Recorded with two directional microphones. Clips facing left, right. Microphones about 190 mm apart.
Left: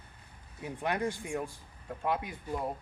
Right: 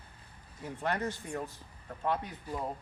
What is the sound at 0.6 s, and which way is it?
Speech, 15° left (ahead or behind).